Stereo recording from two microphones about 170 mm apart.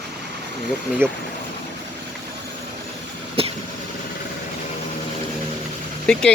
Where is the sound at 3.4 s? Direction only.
30° right (ahead or behind).